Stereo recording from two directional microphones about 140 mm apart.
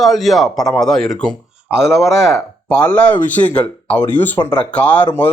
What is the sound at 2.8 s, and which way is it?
Speech, 10° left (ahead or behind).